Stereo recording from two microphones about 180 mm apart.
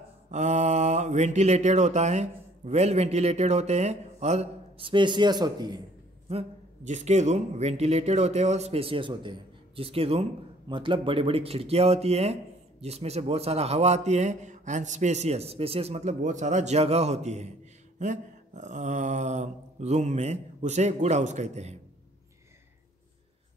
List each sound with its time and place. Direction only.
0.3 s speech: 40° right (ahead or behind); by 5.8 s 20° right (ahead or behind)
6.2 s speech: 35° right (ahead or behind)